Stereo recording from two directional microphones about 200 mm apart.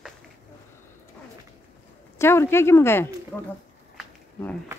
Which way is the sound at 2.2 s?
10° left (ahead or behind).